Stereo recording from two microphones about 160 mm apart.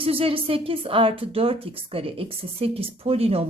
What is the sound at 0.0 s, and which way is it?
Speech, 35° right (ahead or behind).